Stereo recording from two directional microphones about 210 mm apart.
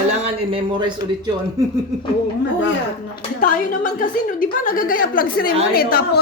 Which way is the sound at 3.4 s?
40° left (ahead or behind).